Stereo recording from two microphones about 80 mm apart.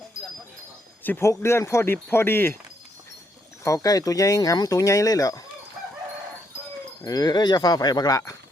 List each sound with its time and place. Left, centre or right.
1.2 s speech: left
3.6 s speech: left
7.0 s speech: left